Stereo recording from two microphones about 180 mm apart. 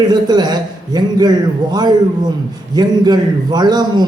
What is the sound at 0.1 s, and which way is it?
A man's voice, 25° right (ahead or behind).